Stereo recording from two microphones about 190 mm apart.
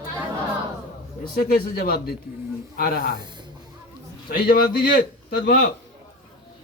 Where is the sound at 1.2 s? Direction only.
50° left (ahead or behind).